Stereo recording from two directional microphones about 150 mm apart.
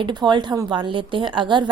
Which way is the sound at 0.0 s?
30° right (ahead or behind).